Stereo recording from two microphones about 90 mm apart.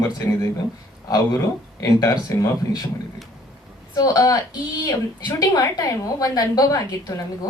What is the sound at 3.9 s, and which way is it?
A woman's voice, 45° left (ahead or behind).